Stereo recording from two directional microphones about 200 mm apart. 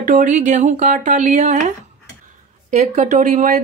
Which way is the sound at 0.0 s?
40° right (ahead or behind).